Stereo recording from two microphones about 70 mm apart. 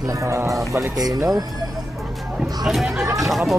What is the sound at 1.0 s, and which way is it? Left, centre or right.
Speech, right.